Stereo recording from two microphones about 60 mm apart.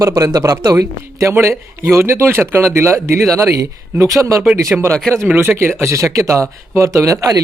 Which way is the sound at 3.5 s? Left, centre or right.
Right.